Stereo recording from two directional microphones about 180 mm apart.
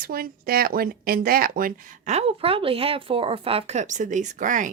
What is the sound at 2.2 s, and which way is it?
Speech, 30° right (ahead or behind).